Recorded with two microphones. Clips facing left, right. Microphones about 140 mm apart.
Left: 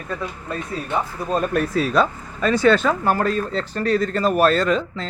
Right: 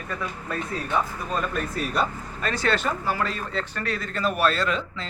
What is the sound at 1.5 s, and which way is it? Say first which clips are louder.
Speech: left 8 dB; 90° left.